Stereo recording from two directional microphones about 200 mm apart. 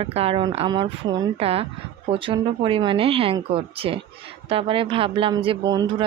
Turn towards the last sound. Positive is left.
turn(degrees=-20)  # may be behind; listen again after turning